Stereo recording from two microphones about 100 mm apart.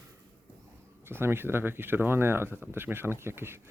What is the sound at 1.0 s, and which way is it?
Speech, 25° right (ahead or behind).